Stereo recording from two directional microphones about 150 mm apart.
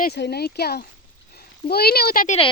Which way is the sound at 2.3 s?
40° left (ahead or behind).